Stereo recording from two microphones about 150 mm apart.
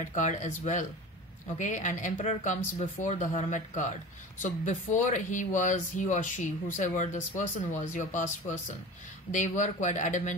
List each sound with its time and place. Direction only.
0.0 s speech: 55° left (ahead or behind)